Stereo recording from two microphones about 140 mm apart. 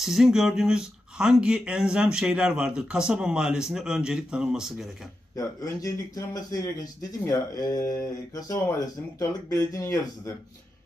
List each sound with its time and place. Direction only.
0.0 s speech: 5° right (ahead or behind)
5.3 s speech: 25° left (ahead or behind)